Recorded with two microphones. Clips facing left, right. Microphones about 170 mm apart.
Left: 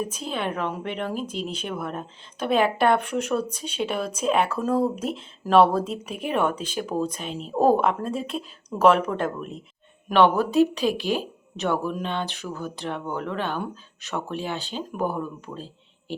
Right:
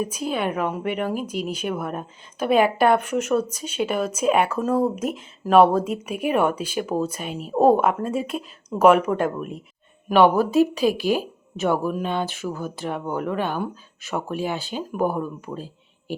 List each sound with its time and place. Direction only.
0.0 s a woman's voice: 5° right (ahead or behind)